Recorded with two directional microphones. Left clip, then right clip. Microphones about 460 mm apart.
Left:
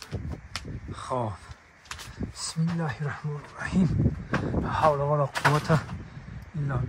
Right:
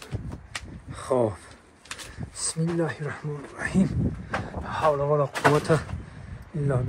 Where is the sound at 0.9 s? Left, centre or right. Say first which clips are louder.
Right 6 dB; centre.